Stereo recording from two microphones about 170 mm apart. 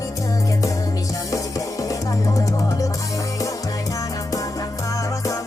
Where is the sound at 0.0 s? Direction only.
20° left (ahead or behind).